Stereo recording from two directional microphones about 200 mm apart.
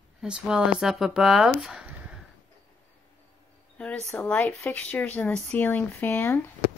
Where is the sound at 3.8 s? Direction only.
5° left (ahead or behind).